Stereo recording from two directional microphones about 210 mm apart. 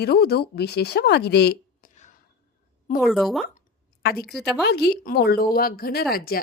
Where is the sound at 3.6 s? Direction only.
45° left (ahead or behind).